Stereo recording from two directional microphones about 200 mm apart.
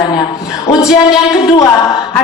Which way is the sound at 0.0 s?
20° left (ahead or behind).